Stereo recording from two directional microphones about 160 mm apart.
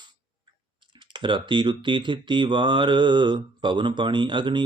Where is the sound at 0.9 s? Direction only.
30° right (ahead or behind).